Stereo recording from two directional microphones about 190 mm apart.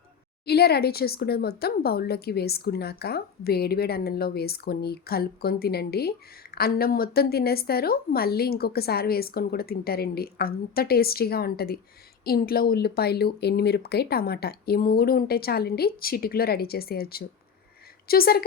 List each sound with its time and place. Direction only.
0.4 s a woman's voice: 55° left (ahead or behind)